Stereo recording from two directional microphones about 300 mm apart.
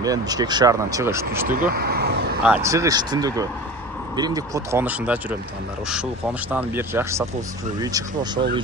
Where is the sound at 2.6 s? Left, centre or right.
Centre.